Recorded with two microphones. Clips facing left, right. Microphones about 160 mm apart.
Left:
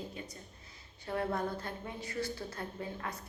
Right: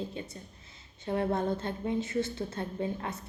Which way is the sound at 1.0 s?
25° right (ahead or behind).